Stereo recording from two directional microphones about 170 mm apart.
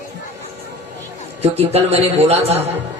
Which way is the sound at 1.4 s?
35° right (ahead or behind).